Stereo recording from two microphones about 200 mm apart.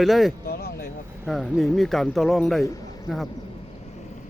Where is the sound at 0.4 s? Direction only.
50° left (ahead or behind).